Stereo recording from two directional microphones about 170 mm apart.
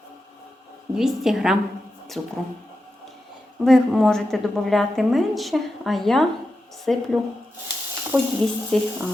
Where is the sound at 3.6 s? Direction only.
Centre (ahead or behind).